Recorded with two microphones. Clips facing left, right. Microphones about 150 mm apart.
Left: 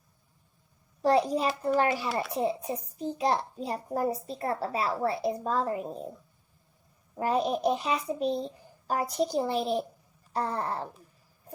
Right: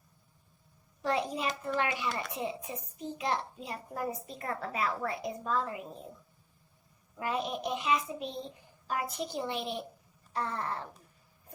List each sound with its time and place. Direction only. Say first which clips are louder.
1.0 s a child's voice: left 7 dB; 35° left (ahead or behind)
7.2 s a child's voice: left 7 dB; 35° left (ahead or behind)